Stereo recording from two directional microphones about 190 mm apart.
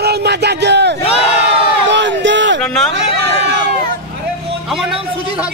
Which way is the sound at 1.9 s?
70° right (ahead or behind).